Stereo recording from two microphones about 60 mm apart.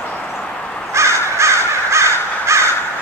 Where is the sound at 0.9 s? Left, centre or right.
Right.